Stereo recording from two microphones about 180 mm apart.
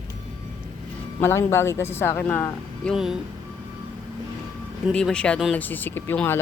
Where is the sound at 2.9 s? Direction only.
Centre (ahead or behind).